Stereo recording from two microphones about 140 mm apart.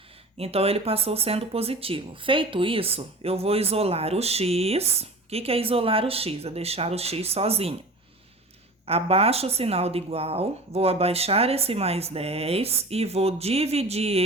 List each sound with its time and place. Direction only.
0.3 s speech: 45° right (ahead or behind)
8.9 s speech: 45° right (ahead or behind)